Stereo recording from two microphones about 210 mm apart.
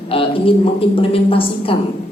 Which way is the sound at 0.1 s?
25° left (ahead or behind).